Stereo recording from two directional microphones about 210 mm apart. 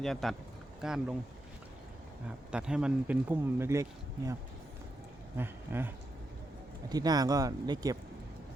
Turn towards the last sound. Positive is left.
turn(degrees=-15)  # may be behind; listen again after turning